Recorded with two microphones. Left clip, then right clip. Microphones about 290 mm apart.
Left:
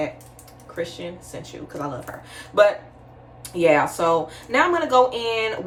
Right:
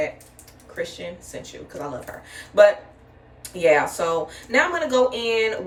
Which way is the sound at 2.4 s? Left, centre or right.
Centre.